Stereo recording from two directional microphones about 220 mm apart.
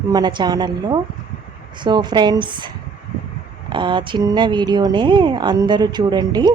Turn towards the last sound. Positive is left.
turn(degrees=-20)  # may be behind; listen again after turning